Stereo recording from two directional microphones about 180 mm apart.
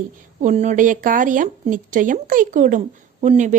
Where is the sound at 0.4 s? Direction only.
40° right (ahead or behind).